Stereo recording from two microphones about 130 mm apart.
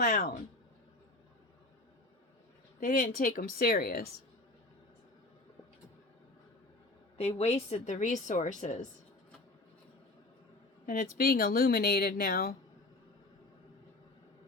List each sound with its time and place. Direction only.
0.0 s a woman's voice: 90° left
2.8 s a woman's voice: 90° left
7.2 s a woman's voice: 55° left (ahead or behind)
10.8 s a woman's voice: 90° left